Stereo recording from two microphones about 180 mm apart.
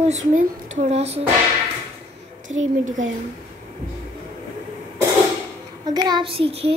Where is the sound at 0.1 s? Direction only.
40° right (ahead or behind).